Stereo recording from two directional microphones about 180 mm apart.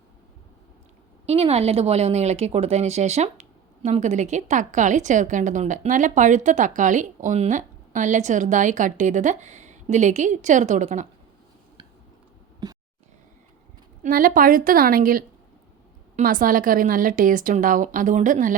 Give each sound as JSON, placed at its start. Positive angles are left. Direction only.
{"t": 1.3, "sound": "a woman's voice", "side_deg": -35}
{"t": 12.6, "sound": "a sound", "side_deg": -25}
{"t": 14.0, "sound": "a woman's voice", "side_deg": -50}